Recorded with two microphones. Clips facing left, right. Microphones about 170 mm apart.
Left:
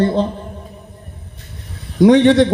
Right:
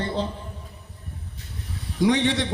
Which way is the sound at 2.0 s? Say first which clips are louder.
Left 12 dB; 55° left (ahead or behind).